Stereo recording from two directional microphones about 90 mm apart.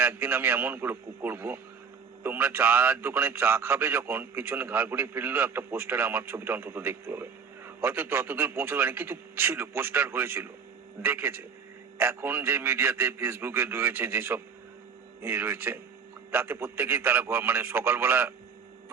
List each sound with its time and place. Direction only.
0.0 s a man's voice: 25° right (ahead or behind)